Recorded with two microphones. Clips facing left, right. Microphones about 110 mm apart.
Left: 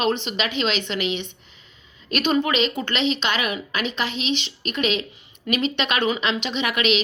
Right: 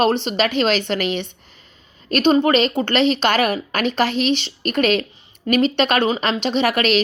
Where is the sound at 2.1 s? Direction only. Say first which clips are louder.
Right 6 dB; 35° right (ahead or behind).